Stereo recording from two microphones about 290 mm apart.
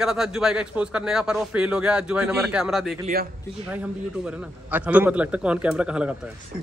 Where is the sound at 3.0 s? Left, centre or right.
Right.